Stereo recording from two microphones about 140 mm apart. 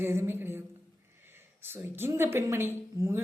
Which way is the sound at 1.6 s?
15° right (ahead or behind).